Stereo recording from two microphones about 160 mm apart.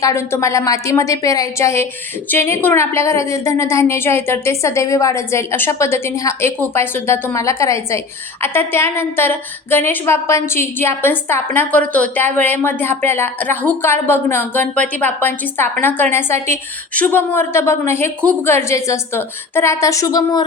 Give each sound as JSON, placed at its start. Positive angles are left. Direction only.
{"t": 0.0, "sound": "a woman's voice", "side_deg": 20}